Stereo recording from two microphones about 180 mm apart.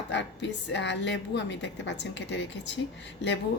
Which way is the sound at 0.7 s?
80° left.